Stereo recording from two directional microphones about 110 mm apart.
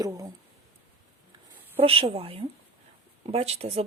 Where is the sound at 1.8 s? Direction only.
60° right (ahead or behind).